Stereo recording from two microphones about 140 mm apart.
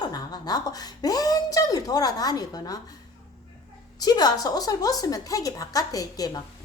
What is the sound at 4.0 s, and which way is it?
A woman's voice, 30° left (ahead or behind).